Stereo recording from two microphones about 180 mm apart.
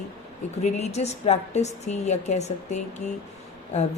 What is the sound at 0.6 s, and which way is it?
Speech, 35° left (ahead or behind).